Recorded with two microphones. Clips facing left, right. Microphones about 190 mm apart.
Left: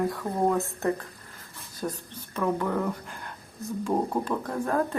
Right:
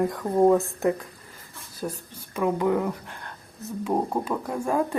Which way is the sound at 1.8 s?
10° right (ahead or behind).